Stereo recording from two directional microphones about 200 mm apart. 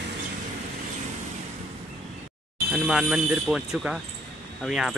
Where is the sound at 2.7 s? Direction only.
Centre (ahead or behind).